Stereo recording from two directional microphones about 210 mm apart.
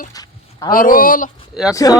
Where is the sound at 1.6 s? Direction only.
Centre (ahead or behind).